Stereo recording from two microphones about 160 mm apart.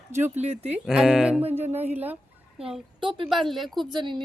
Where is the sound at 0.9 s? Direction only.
5° right (ahead or behind).